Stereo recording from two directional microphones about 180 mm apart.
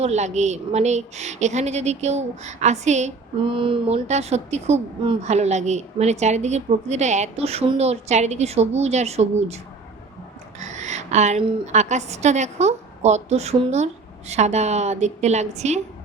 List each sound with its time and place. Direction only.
0.0 s a woman's voice: 40° right (ahead or behind)
3.5 s a woman's voice: 30° right (ahead or behind)
10.6 s a sound: 40° right (ahead or behind)
11.6 s a woman's voice: 40° right (ahead or behind)